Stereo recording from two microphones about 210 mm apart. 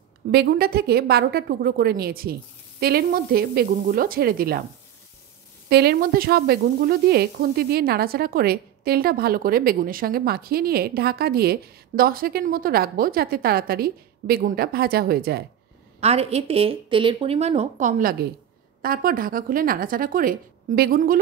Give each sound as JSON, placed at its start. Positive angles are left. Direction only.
{"t": 0.3, "sound": "speech", "side_deg": -50}
{"t": 5.7, "sound": "speech", "side_deg": -50}
{"t": 16.0, "sound": "speech", "side_deg": -30}